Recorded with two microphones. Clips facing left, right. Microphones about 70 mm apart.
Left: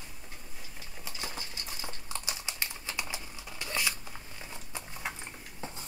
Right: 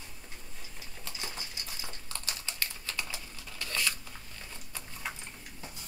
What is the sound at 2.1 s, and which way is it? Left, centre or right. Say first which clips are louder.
Typing: left 2 dB; centre.